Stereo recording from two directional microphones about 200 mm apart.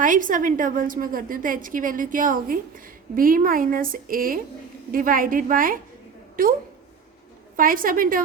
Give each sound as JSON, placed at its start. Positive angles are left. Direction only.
{"t": 0.0, "sound": "a woman's voice", "side_deg": -40}